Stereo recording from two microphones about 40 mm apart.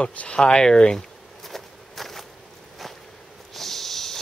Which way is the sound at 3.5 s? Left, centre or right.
Centre.